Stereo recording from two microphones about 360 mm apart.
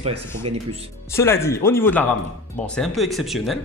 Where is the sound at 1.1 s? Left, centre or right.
Centre.